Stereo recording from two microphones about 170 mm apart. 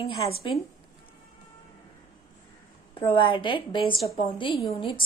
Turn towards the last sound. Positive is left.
turn(degrees=30)  # may be behind; listen again after turning